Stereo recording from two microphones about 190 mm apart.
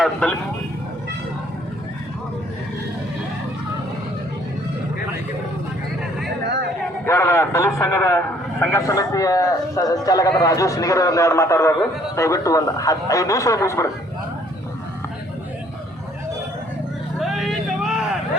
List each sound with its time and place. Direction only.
0.0 s speech: 5° left (ahead or behind)
7.0 s a man's voice: 15° left (ahead or behind)
17.2 s vehicle: centre (ahead or behind)